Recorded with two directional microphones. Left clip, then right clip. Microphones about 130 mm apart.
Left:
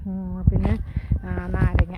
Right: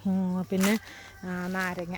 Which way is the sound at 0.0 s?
35° right (ahead or behind).